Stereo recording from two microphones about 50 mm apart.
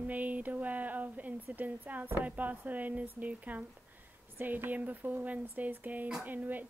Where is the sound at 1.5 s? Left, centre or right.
Right.